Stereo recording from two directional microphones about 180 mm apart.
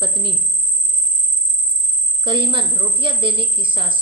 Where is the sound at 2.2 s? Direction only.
25° right (ahead or behind).